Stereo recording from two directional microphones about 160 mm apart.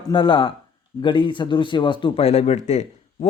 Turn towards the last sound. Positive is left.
turn(degrees=45)  # may be behind; listen again after turning